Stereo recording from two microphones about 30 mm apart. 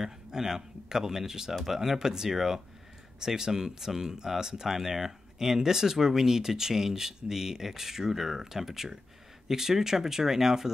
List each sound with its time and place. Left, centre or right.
0.0 s speech: centre